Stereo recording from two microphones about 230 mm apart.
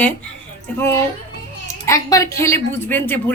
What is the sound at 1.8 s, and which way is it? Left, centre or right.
A woman's voice, centre.